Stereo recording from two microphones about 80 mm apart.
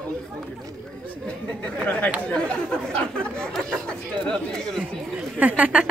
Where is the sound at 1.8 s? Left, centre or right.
Left; by 4.8 s centre.